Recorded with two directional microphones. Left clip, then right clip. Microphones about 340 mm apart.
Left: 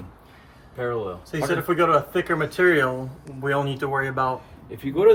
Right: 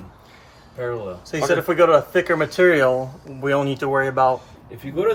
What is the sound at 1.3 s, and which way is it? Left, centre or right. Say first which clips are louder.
Speech: right 5 dB; right.